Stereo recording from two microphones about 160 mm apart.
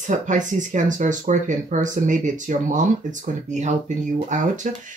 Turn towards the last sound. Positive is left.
turn(degrees=-50)  # may be behind; listen again after turning